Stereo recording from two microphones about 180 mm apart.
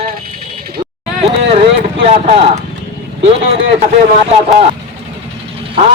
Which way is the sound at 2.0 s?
35° right (ahead or behind).